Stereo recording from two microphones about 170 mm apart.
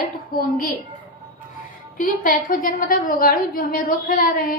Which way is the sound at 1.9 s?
55° left (ahead or behind).